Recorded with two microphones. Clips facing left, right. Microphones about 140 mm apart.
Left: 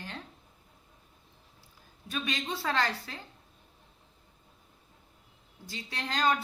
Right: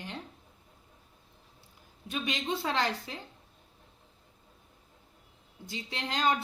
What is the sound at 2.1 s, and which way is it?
A woman's voice, 20° right (ahead or behind).